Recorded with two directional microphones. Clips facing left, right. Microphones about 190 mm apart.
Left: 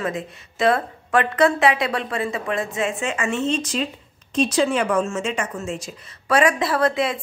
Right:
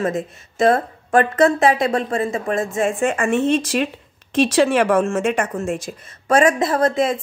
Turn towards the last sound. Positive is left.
turn(degrees=-45)  # may be behind; listen again after turning